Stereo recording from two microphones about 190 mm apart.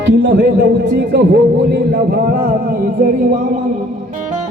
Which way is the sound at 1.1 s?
60° right (ahead or behind).